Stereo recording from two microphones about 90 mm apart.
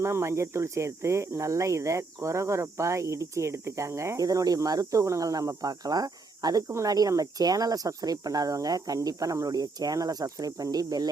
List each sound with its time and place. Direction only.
0.0 s speech: 30° right (ahead or behind)